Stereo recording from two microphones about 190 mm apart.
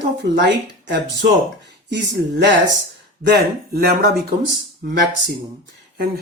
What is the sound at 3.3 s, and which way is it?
Speech, 55° right (ahead or behind).